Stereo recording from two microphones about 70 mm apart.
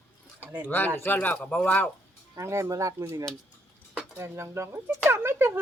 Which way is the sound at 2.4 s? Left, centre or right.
Right.